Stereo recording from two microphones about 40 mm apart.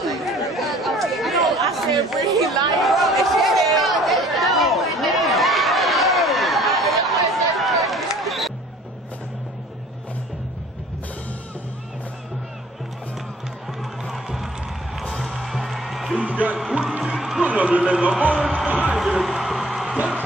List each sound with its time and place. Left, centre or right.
0.0 s chatter: centre
15.4 s music: centre
16.2 s music: right
17.0 s music: centre
17.6 s music: right
18.7 s music: right
18.9 s music: centre